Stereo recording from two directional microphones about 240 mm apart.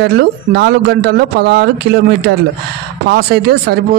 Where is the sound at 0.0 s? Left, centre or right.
Right.